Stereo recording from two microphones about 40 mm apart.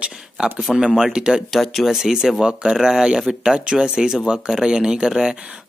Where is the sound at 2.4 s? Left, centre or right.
Right.